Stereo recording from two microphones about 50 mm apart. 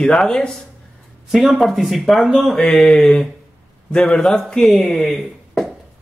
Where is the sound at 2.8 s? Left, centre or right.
Centre.